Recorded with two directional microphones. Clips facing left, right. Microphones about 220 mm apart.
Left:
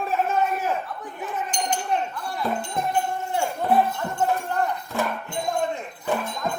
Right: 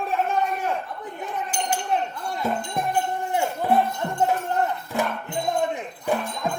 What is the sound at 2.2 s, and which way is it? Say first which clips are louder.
Music: right 1 dB; 20° right (ahead or behind).